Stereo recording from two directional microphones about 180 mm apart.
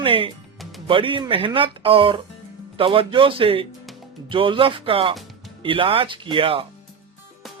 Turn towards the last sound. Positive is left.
turn(degrees=-30)  # may be behind; listen again after turning